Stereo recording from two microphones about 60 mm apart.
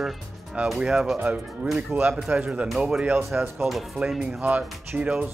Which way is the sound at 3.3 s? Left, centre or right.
Right.